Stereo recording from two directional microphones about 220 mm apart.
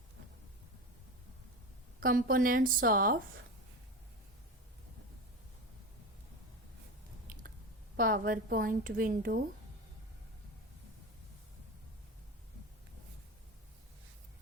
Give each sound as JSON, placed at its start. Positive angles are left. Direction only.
{"t": 2.0, "sound": "a woman's voice", "side_deg": -40}
{"t": 7.9, "sound": "a woman's voice", "side_deg": -40}